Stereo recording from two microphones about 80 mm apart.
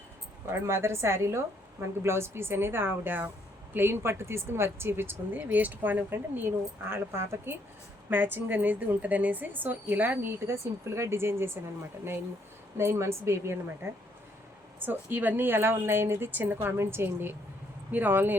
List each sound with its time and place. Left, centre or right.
0.7 s a woman's voice: right
12.7 s a woman's voice: right
14.8 s speech: right